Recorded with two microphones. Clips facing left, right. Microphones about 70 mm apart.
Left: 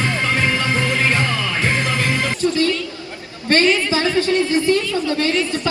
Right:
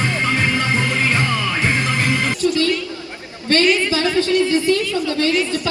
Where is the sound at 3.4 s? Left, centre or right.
Left.